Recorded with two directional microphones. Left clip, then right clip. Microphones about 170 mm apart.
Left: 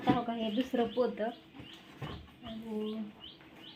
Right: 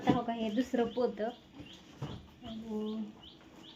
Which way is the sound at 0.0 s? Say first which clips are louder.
Even; 10° left (ahead or behind).